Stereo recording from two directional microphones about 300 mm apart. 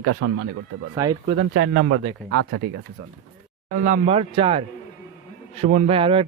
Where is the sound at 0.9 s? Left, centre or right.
Centre.